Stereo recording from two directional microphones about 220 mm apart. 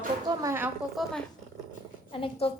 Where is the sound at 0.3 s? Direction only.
10° right (ahead or behind).